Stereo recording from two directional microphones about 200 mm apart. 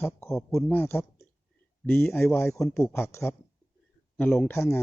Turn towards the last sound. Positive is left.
turn(degrees=15)  # may be behind; listen again after turning